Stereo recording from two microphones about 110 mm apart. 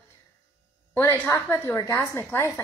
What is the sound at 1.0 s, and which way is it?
A woman's voice, 25° left (ahead or behind).